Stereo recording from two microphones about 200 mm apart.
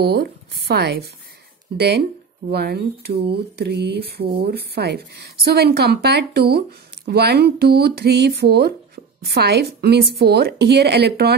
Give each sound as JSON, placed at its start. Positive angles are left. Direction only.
{"t": 0.0, "sound": "speech", "side_deg": -55}
{"t": 2.5, "sound": "speech", "side_deg": -55}